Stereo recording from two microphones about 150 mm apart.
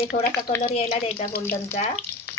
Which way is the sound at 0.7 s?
45° left (ahead or behind).